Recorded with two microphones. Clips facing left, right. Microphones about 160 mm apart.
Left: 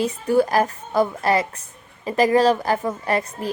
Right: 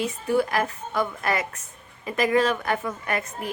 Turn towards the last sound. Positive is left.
turn(degrees=35)  # may be behind; listen again after turning